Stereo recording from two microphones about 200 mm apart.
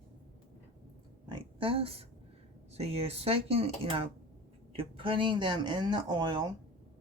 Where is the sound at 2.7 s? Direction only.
30° right (ahead or behind).